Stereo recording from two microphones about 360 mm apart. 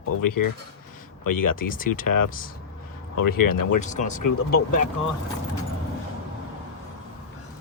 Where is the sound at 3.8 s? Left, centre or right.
Left.